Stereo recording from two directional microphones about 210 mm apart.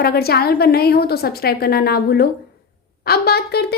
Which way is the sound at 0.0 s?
50° left (ahead or behind).